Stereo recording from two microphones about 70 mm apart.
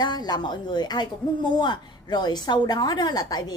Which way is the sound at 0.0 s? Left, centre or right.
Left.